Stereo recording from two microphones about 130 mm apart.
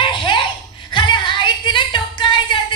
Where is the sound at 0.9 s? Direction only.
35° left (ahead or behind).